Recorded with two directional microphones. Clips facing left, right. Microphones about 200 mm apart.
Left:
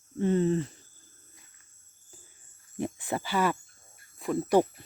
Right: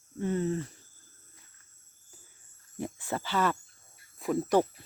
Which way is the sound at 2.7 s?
15° left (ahead or behind).